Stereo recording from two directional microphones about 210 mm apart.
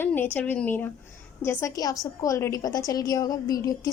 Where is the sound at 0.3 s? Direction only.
10° left (ahead or behind).